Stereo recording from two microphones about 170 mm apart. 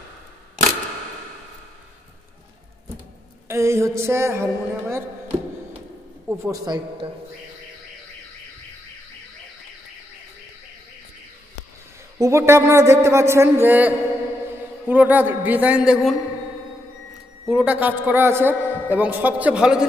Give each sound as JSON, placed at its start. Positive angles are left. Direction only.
{"t": 3.4, "sound": "a man's voice", "side_deg": -15}
{"t": 6.2, "sound": "a man's voice", "side_deg": -15}
{"t": 12.2, "sound": "a man's voice", "side_deg": -15}
{"t": 17.5, "sound": "a man's voice", "side_deg": -5}